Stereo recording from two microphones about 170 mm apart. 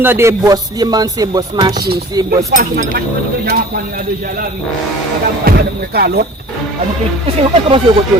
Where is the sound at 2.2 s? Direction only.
55° right (ahead or behind).